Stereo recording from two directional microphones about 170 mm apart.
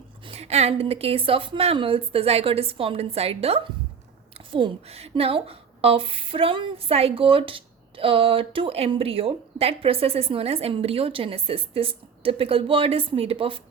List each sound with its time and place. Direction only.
0.3 s speech: 40° right (ahead or behind)